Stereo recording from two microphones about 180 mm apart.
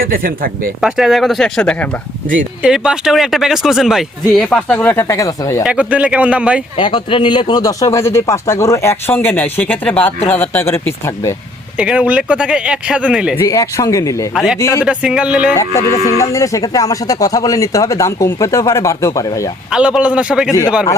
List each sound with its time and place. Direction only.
0.0 s speech: 55° right (ahead or behind)
0.8 s speech: centre (ahead or behind); by 5.6 s 15° left (ahead or behind)
5.6 s speech: 5° right (ahead or behind)
6.7 s speech: 25° left (ahead or behind)
11.8 s speech: 5° right (ahead or behind)
13.3 s speech: 20° left (ahead or behind)
14.3 s speech: centre (ahead or behind)
14.6 s speech: 15° left (ahead or behind)
14.8 s speech: 5° right (ahead or behind)
15.5 s speech: 15° left (ahead or behind)
19.7 s speech: 5° right (ahead or behind)